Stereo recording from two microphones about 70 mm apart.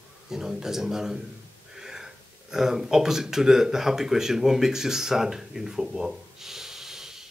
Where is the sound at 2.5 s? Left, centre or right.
Centre.